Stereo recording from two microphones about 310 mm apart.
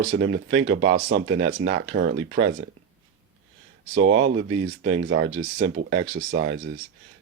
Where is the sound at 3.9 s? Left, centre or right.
Right.